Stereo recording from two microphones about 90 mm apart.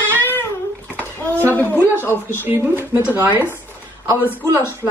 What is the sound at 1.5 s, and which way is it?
Speech, 20° left (ahead or behind).